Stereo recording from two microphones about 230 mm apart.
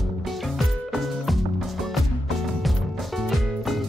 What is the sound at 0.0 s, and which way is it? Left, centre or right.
Music, centre.